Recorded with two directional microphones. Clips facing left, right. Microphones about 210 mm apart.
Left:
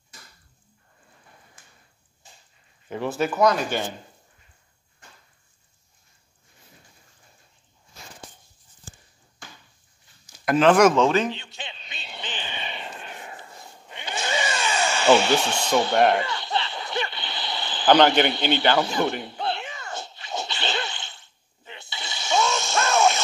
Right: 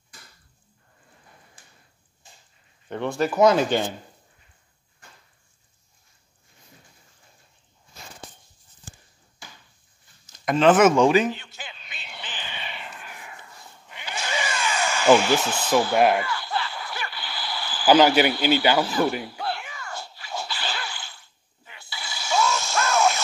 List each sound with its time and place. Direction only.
2.9 s a man's voice: 5° left (ahead or behind)
3.3 s speech: 25° right (ahead or behind)
10.2 s speech: 5° left (ahead or behind); by 11.3 s 10° right (ahead or behind)
11.3 s a sound: 25° left (ahead or behind)
15.1 s speech: 25° left (ahead or behind)
15.9 s a man's voice: 5° right (ahead or behind)
16.2 s a sound: 25° left (ahead or behind)
17.8 s a man's voice: 5° right (ahead or behind)
18.9 s speech: 25° left (ahead or behind)
19.3 s whip: 25° left (ahead or behind)